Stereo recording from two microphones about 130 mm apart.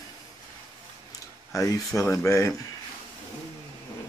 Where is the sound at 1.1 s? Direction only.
25° left (ahead or behind).